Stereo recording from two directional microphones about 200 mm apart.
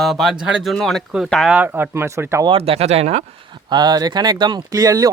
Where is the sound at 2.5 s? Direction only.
30° right (ahead or behind).